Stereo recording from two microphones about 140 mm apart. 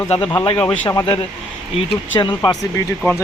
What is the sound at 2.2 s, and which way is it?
Speech, 35° left (ahead or behind).